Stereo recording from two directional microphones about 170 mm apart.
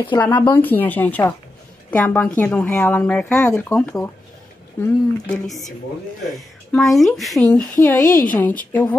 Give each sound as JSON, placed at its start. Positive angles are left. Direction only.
{"t": 0.4, "sound": "speech", "side_deg": 10}
{"t": 6.7, "sound": "speech", "side_deg": 0}
{"t": 8.0, "sound": "speech", "side_deg": 55}
{"t": 8.4, "sound": "speech", "side_deg": 10}